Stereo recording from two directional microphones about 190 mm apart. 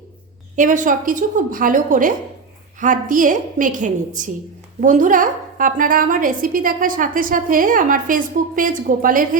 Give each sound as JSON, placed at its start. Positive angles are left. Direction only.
{"t": 0.5, "sound": "a woman's voice", "side_deg": -40}